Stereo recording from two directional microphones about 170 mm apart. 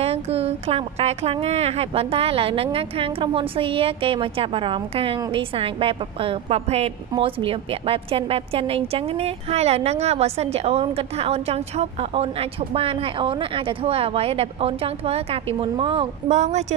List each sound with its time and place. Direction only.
0.0 s speech: 35° right (ahead or behind)